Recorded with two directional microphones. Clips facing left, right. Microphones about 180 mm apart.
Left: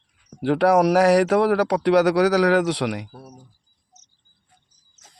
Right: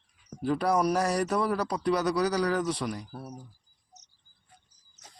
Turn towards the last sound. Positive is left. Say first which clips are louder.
# right 1 dB
turn(degrees=0)  # may be behind; listen again after turning